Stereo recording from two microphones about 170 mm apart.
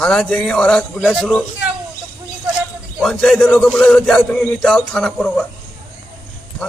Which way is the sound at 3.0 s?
5° left (ahead or behind).